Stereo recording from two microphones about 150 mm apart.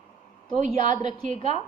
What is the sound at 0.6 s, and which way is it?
A woman's voice, 55° right (ahead or behind).